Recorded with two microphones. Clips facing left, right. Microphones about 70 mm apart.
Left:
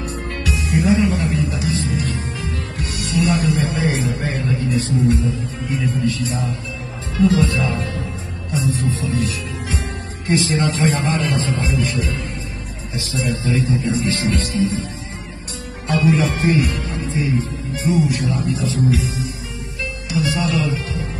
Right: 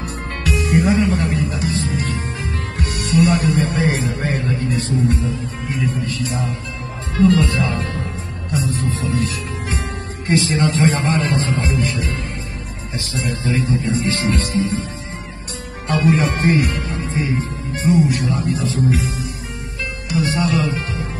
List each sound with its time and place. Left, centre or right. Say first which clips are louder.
0.5 s music: right 1 dB; right
6.0 s speech: left 2 dB; right
9.7 s music: right 1 dB; right
10.5 s speech: right 2 dB; right
15.9 s speech: even; right